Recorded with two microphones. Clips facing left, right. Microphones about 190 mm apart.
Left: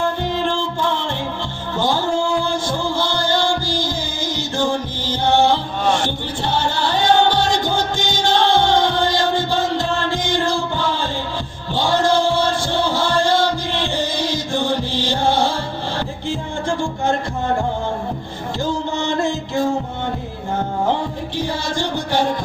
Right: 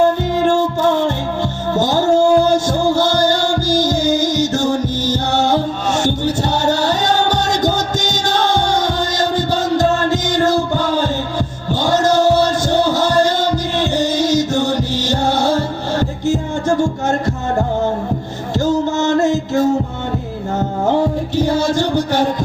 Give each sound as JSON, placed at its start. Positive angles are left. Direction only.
{"t": 0.0, "sound": "music", "side_deg": -45}
{"t": 18.5, "sound": "music", "side_deg": -45}
{"t": 21.3, "sound": "music", "side_deg": -45}